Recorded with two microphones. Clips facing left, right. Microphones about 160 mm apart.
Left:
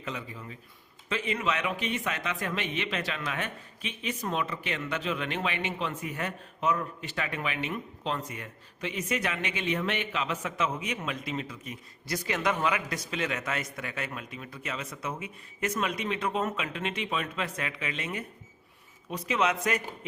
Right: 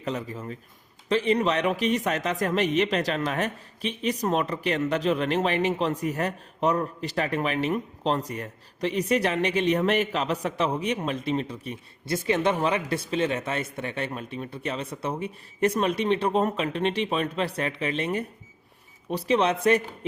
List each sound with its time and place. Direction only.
0.0 s a man's voice: 40° right (ahead or behind)